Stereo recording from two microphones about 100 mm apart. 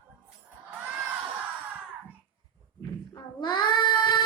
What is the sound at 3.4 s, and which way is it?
Child singing, 50° left (ahead or behind).